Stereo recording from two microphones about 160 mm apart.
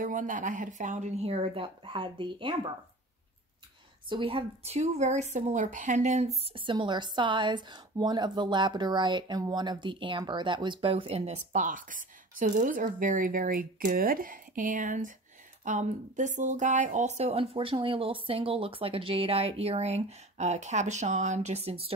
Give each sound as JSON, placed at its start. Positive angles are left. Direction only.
{"t": 0.0, "sound": "a woman's voice", "side_deg": -55}
{"t": 4.1, "sound": "a woman's voice", "side_deg": -35}